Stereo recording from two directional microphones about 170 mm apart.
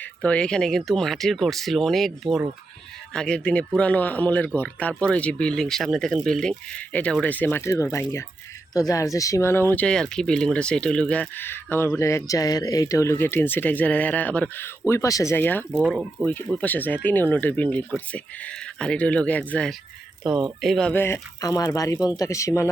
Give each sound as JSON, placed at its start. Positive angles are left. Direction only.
{"t": 0.0, "sound": "speech", "side_deg": 10}
{"t": 15.7, "sound": "speech", "side_deg": -5}
{"t": 16.2, "sound": "speech", "side_deg": 10}